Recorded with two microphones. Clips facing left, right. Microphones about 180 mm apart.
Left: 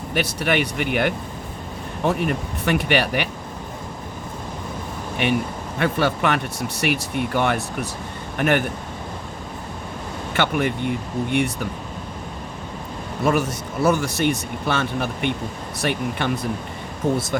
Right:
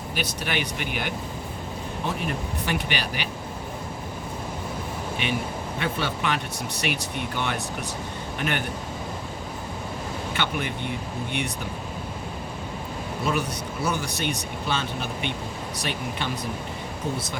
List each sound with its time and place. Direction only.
0.1 s speech: 65° left (ahead or behind)
5.2 s speech: 60° left (ahead or behind)
10.3 s speech: 60° left (ahead or behind)
13.2 s speech: 60° left (ahead or behind)